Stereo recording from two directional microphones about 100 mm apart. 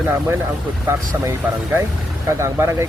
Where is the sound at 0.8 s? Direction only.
25° right (ahead or behind).